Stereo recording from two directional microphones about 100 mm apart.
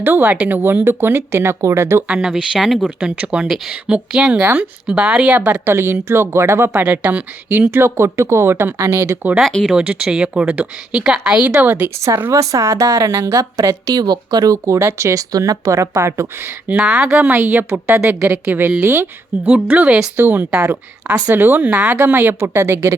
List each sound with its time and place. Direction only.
0.0 s speech: 15° right (ahead or behind)
2.0 s a woman's voice: 5° right (ahead or behind)
5.6 s speech: 25° right (ahead or behind)
9.5 s speech: 10° left (ahead or behind)
9.7 s a woman's voice: 10° right (ahead or behind)
11.9 s a woman's voice: 30° right (ahead or behind)
16.6 s a woman's voice: 10° right (ahead or behind)
17.2 s a woman's voice: 20° right (ahead or behind)